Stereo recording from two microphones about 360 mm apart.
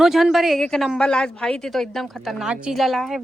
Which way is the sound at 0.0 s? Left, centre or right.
Centre.